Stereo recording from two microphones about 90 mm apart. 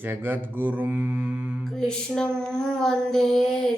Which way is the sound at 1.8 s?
5° left (ahead or behind).